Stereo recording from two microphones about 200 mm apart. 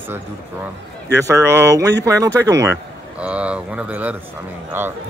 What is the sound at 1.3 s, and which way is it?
Speech, 15° right (ahead or behind).